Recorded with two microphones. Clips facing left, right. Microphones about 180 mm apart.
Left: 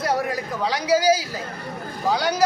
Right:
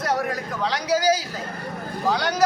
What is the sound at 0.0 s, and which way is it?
A man's voice, 5° left (ahead or behind).